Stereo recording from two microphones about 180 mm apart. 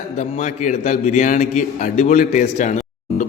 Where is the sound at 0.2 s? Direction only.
40° left (ahead or behind).